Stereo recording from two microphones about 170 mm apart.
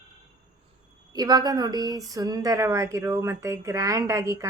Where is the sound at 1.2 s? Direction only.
25° right (ahead or behind).